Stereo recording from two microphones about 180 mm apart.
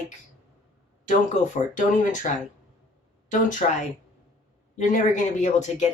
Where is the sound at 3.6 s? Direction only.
40° left (ahead or behind).